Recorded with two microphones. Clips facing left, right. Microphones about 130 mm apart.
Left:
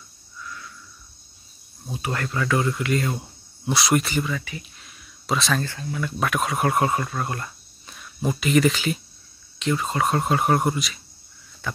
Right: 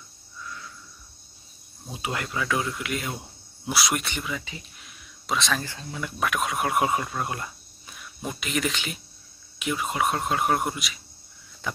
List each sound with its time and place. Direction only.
1.9 s speech: 15° right (ahead or behind); by 4.3 s centre (ahead or behind)
4.3 s speech: 10° right (ahead or behind)
4.8 s a sound: centre (ahead or behind)
5.6 s speech: 15° right (ahead or behind)
6.1 s speech: centre (ahead or behind)
8.2 s speech: centre (ahead or behind)
11.6 s insect: 15° right (ahead or behind)